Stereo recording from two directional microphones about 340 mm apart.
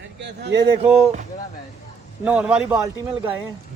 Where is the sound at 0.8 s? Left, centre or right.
Centre.